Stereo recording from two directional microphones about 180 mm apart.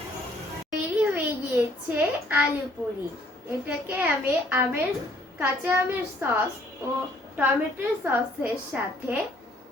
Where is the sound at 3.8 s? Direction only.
10° right (ahead or behind).